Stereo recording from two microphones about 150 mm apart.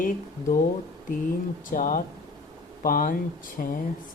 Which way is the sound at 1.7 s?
60° left (ahead or behind).